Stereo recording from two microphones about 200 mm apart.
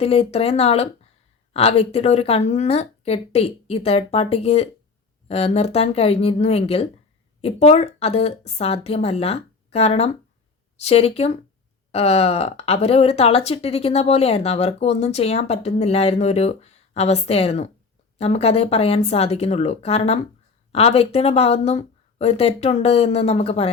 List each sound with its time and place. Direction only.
0.0 s speech: 30° left (ahead or behind)